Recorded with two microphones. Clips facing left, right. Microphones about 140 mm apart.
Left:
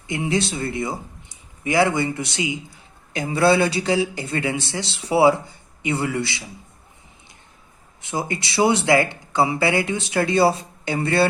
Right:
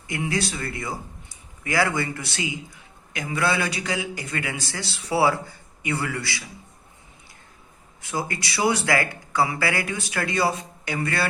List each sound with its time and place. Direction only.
0.1 s a man's voice: 25° left (ahead or behind)
8.0 s a man's voice: 25° left (ahead or behind)